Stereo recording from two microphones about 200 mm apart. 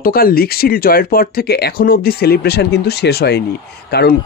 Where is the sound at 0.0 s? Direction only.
45° left (ahead or behind).